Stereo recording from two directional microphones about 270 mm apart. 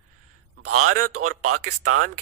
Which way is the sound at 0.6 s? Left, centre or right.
Right.